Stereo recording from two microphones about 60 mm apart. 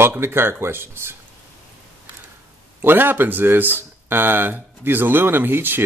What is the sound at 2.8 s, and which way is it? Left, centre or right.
A man's voice, right.